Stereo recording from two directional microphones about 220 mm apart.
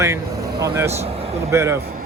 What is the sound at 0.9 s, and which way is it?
Speech, 30° right (ahead or behind).